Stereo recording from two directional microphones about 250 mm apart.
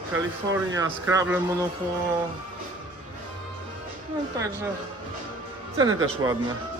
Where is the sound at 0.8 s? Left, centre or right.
Centre.